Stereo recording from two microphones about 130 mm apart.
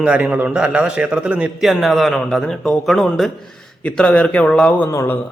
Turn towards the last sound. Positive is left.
turn(degrees=20)  # may be behind; listen again after turning